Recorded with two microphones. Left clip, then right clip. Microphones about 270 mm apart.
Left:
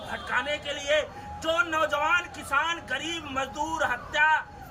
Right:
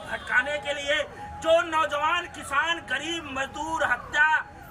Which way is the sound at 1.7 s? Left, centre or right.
Centre.